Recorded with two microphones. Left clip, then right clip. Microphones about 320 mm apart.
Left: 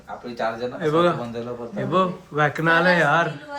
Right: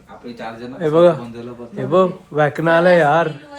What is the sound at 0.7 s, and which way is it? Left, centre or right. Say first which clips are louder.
A man's voice: right 8 dB; centre.